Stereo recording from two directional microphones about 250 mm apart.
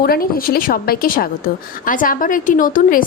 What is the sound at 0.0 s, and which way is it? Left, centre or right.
A woman's voice, left.